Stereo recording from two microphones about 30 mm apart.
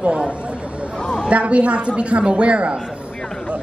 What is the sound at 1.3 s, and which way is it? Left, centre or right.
A woman's voice, right.